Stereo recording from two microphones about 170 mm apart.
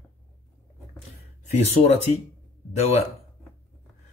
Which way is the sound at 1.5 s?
40° left (ahead or behind).